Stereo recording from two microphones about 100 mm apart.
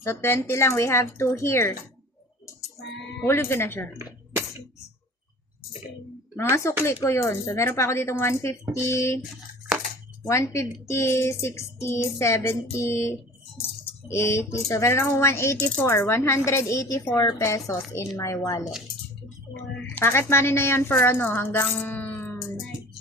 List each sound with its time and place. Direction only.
0.0 s speech: 25° left (ahead or behind)
3.2 s speech: 25° left (ahead or behind)
6.3 s speech: 30° left (ahead or behind)
9.7 s a sound: 5° right (ahead or behind)
10.2 s a woman's voice: 30° left (ahead or behind)
19.9 s speech: 20° left (ahead or behind)